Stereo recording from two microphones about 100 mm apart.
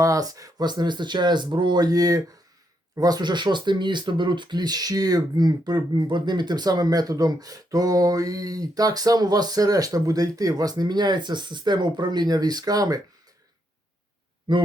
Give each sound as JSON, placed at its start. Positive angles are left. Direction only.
{"t": 0.0, "sound": "speech", "side_deg": -35}
{"t": 14.5, "sound": "speech", "side_deg": -50}